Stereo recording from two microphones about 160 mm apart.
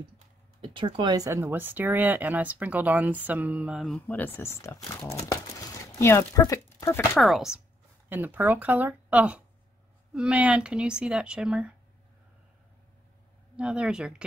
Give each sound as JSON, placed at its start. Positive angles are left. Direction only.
{"t": 0.6, "sound": "speech", "side_deg": -30}
{"t": 4.1, "sound": "speech", "side_deg": 15}
{"t": 7.2, "sound": "speech", "side_deg": 0}
{"t": 13.6, "sound": "speech", "side_deg": -5}